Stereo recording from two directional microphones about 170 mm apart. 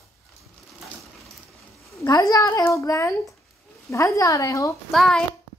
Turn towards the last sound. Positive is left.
turn(degrees=0)  # may be behind; listen again after turning